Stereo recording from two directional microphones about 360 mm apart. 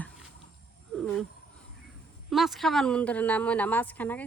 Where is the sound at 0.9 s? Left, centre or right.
Centre.